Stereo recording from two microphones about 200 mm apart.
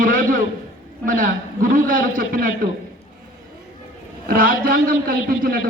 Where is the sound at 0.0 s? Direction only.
45° right (ahead or behind).